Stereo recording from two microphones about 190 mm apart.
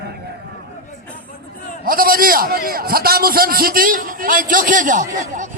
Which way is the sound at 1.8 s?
50° right (ahead or behind).